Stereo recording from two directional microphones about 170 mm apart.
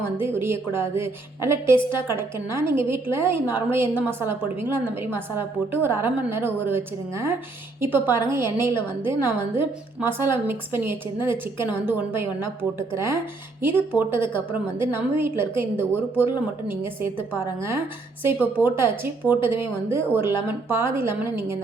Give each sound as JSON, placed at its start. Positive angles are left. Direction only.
{"t": 0.2, "sound": "a woman's voice", "side_deg": -15}
{"t": 18.2, "sound": "a woman's voice", "side_deg": -10}